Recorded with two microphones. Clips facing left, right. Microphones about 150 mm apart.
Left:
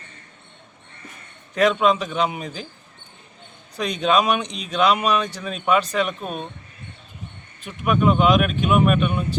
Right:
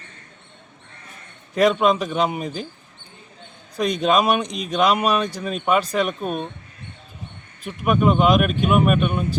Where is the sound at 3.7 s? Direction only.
10° right (ahead or behind).